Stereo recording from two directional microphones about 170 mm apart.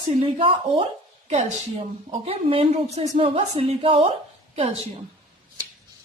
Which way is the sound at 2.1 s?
35° right (ahead or behind).